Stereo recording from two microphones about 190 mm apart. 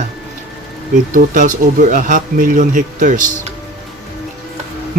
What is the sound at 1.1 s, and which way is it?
Speech, 45° right (ahead or behind).